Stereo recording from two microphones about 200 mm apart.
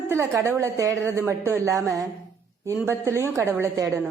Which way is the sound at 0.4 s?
15° right (ahead or behind).